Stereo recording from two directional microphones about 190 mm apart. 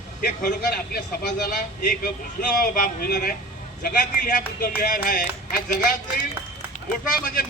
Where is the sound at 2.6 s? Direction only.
50° left (ahead or behind).